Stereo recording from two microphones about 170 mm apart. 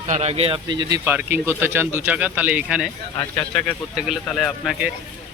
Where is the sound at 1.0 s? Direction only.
10° right (ahead or behind).